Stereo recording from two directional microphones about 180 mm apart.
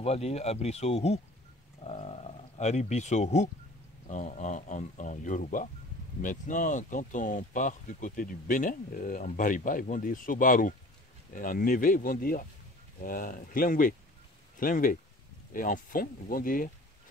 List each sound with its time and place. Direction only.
0.0 s speech: 35° left (ahead or behind)